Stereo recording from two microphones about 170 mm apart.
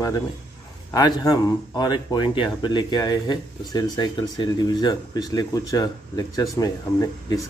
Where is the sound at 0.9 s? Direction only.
25° left (ahead or behind).